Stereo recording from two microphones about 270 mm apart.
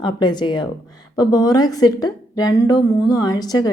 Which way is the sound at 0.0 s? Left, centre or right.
Centre.